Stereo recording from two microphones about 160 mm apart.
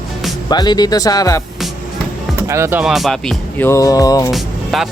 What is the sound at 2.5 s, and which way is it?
Speech, 15° right (ahead or behind).